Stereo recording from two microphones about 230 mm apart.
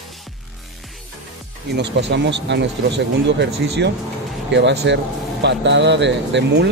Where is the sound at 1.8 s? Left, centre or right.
Right.